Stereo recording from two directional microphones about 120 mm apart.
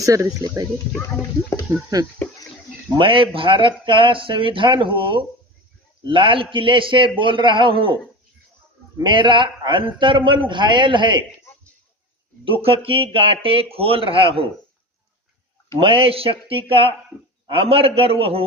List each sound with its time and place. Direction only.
0.0 s speech: 25° right (ahead or behind)
2.1 s a sound: 20° left (ahead or behind)
3.0 s a man's voice: 45° right (ahead or behind)
9.0 s a man's voice: 40° right (ahead or behind)
12.5 s a man's voice: 50° right (ahead or behind)
15.8 s a man's voice: 45° right (ahead or behind)